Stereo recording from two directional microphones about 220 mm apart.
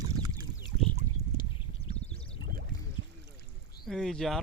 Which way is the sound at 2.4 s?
40° right (ahead or behind).